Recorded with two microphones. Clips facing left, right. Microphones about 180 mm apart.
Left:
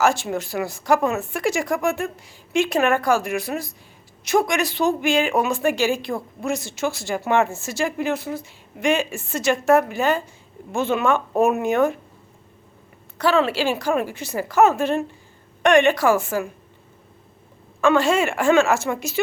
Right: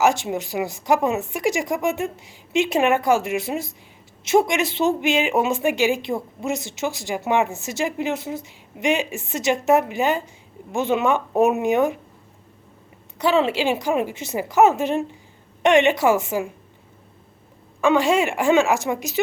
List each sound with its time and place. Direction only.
0.0 s a woman's voice: 20° right (ahead or behind)
13.1 s a woman's voice: 20° right (ahead or behind)
17.7 s a woman's voice: 15° right (ahead or behind)